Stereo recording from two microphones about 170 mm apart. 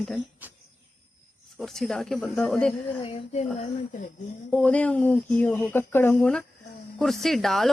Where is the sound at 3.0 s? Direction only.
40° left (ahead or behind).